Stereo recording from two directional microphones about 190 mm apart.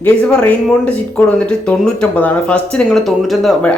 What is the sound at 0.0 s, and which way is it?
A man's voice, 5° left (ahead or behind).